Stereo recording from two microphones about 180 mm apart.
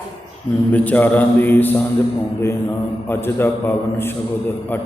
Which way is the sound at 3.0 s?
10° left (ahead or behind).